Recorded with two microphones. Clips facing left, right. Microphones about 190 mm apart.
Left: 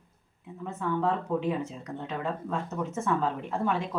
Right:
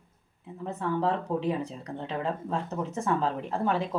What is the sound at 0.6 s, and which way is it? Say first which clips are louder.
Speech: right 1 dB; 35° right (ahead or behind).